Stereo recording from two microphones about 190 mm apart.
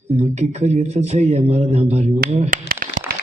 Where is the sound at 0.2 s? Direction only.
35° right (ahead or behind).